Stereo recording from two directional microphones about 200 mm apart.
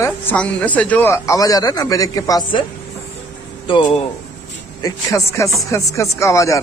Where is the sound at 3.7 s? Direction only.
25° left (ahead or behind).